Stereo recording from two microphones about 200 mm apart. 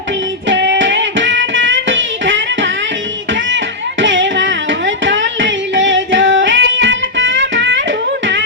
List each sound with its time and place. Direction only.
0.4 s music: 65° right (ahead or behind)
4.0 s music: 65° right (ahead or behind)